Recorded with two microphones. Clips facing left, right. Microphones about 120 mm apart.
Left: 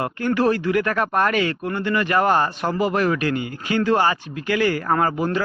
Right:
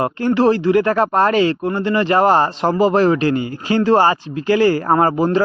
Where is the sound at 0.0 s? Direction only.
30° right (ahead or behind).